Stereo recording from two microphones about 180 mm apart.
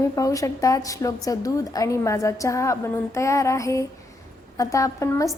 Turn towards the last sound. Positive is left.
turn(degrees=15)  # may be behind; listen again after turning